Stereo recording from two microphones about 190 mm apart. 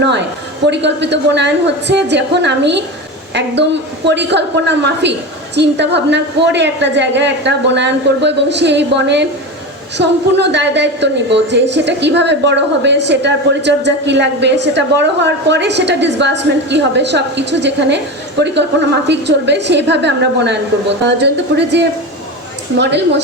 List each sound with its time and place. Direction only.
0.0 s a woman's voice: 65° right (ahead or behind)